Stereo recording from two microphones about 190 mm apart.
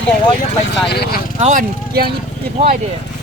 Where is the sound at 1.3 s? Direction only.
35° right (ahead or behind).